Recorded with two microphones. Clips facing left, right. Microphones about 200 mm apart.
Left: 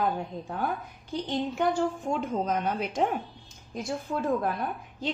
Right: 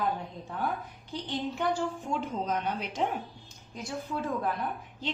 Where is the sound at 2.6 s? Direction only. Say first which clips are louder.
Left 4 dB; 50° left (ahead or behind).